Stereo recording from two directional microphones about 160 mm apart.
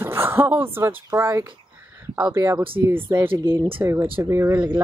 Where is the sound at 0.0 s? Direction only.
15° right (ahead or behind).